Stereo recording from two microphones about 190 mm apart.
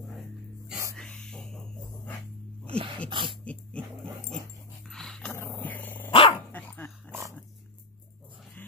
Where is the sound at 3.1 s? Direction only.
25° right (ahead or behind).